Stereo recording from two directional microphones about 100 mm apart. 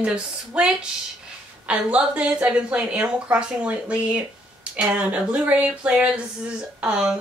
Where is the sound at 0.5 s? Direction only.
10° right (ahead or behind).